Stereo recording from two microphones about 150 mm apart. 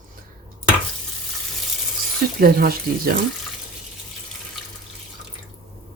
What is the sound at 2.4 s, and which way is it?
Speech, 80° right.